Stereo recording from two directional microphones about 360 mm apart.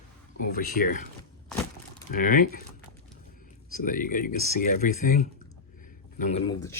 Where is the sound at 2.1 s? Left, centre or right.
Left.